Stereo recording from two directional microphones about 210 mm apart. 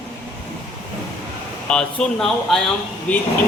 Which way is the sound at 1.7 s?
5° left (ahead or behind).